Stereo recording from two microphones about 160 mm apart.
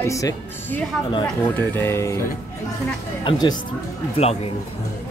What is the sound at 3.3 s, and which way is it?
Speech, 25° left (ahead or behind).